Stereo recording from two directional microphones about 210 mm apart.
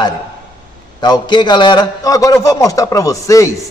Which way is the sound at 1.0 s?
20° left (ahead or behind).